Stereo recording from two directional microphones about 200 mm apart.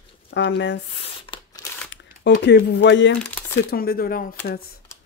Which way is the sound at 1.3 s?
25° left (ahead or behind).